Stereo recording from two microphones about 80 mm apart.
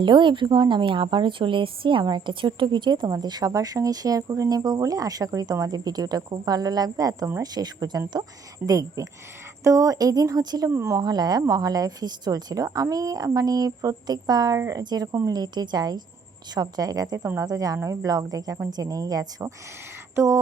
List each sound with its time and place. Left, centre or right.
0.0 s a woman's voice: right
3.1 s speech: right
10.8 s speech: right
11.0 s speech: right
14.6 s speech: right
14.8 s speech: right